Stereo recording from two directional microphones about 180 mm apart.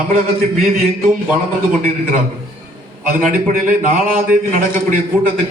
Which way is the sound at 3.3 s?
50° right (ahead or behind).